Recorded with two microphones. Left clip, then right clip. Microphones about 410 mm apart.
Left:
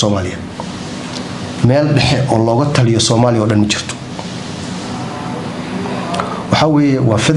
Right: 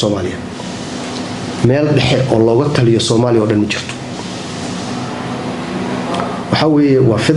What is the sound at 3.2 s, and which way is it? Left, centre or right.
Speech, left.